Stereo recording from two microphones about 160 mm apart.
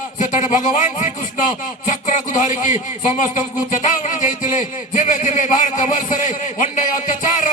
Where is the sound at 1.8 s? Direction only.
50° left (ahead or behind).